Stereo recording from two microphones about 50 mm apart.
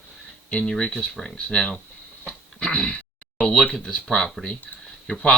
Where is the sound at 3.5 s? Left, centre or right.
Centre.